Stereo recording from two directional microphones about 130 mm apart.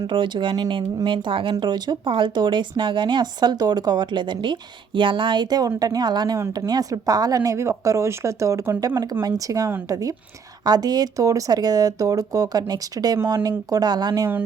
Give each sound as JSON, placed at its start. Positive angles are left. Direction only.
{"t": 0.1, "sound": "speech", "side_deg": -40}